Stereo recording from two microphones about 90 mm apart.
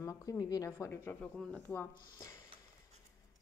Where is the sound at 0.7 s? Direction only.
25° left (ahead or behind).